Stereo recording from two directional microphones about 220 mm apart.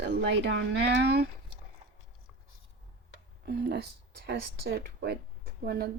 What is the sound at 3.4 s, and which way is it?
Speech, 50° right (ahead or behind).